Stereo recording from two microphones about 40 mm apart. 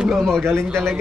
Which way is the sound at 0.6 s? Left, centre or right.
Right.